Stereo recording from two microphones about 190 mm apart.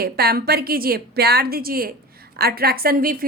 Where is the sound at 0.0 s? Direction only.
55° right (ahead or behind).